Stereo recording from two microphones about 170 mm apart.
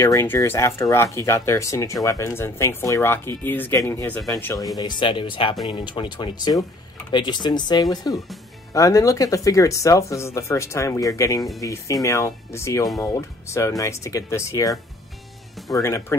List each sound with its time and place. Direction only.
0.0 s speech: 15° left (ahead or behind)